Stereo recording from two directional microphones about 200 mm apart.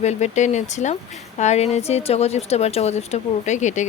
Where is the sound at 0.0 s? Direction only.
35° left (ahead or behind).